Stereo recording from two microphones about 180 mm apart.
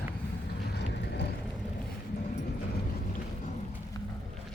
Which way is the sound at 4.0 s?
25° left (ahead or behind).